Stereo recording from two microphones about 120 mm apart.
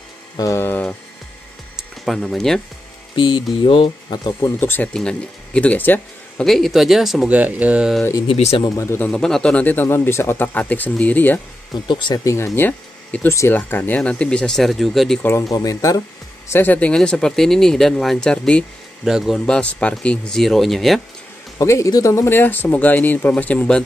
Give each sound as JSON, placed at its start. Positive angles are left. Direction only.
{"t": 0.4, "sound": "speech", "side_deg": 25}
{"t": 1.8, "sound": "speech", "side_deg": -5}
{"t": 3.2, "sound": "speech", "side_deg": 40}
{"t": 4.3, "sound": "speech", "side_deg": 20}
{"t": 6.4, "sound": "speech", "side_deg": 0}
{"t": 8.3, "sound": "speech", "side_deg": 55}
{"t": 8.6, "sound": "speech", "side_deg": 25}
{"t": 11.7, "sound": "speech", "side_deg": 40}
{"t": 12.5, "sound": "speech", "side_deg": 15}
{"t": 15.2, "sound": "speech", "side_deg": 25}
{"t": 16.4, "sound": "speech", "side_deg": 15}
{"t": 19.0, "sound": "speech", "side_deg": -5}
{"t": 19.4, "sound": "speech", "side_deg": 10}
{"t": 21.5, "sound": "speech", "side_deg": 25}